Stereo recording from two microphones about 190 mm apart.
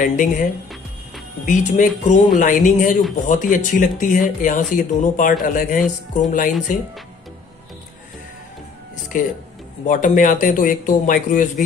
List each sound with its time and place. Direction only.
0.0 s speech: 45° left (ahead or behind)
9.1 s speech: 45° left (ahead or behind)